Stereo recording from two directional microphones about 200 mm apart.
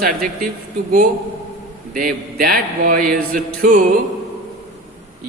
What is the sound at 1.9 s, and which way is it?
Speech, 45° right (ahead or behind).